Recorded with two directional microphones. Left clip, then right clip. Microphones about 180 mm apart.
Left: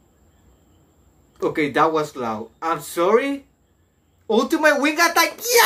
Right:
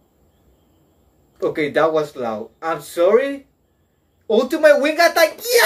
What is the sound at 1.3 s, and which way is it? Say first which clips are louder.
Speech: right 2 dB; 20° left (ahead or behind).